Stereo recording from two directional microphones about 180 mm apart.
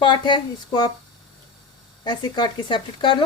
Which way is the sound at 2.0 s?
25° left (ahead or behind).